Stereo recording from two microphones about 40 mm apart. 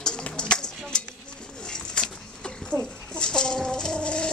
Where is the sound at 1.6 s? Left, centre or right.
Centre.